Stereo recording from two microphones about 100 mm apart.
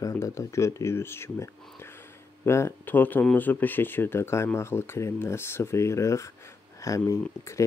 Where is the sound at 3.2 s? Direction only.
15° left (ahead or behind).